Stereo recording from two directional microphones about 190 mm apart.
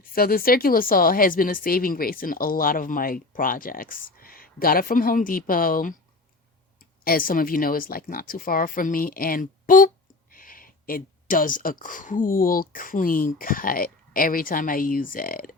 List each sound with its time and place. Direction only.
0.0 s speech: 50° left (ahead or behind)
7.0 s speech: 50° left (ahead or behind)